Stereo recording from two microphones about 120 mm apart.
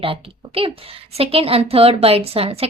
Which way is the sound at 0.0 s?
50° right (ahead or behind).